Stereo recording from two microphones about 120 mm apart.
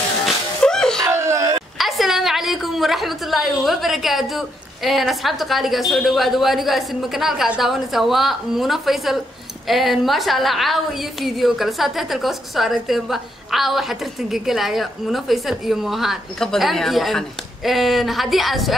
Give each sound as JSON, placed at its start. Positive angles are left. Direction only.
{"t": 0.2, "sound": "music", "side_deg": 5}
{"t": 1.0, "sound": "whimper", "side_deg": -25}
{"t": 1.8, "sound": "a woman's voice", "side_deg": 0}